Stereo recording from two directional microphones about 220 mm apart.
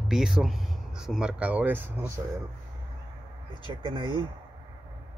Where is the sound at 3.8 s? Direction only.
20° right (ahead or behind).